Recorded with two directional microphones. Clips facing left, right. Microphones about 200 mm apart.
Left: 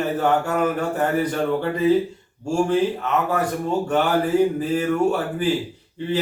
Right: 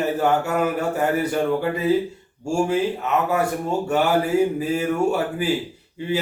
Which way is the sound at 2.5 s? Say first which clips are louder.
Left 1 dB; 10° right (ahead or behind).